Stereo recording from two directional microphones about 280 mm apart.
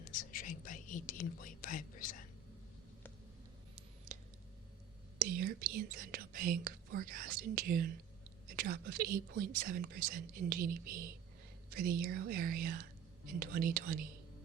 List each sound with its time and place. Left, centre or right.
0.0 s whispering: left
5.2 s whispering: right
8.4 s speech: right